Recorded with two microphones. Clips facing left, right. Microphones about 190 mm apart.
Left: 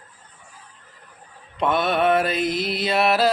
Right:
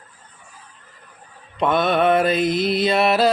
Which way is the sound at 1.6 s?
5° left (ahead or behind).